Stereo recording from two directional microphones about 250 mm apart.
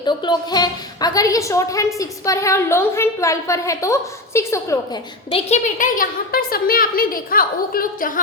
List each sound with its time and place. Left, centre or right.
0.0 s a woman's voice: centre
5.3 s a woman's voice: left